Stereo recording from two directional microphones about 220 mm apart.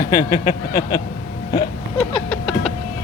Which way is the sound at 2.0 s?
5° left (ahead or behind).